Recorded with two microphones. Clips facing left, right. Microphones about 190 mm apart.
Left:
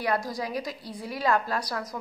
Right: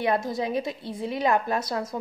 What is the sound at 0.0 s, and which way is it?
A woman's voice, 25° right (ahead or behind).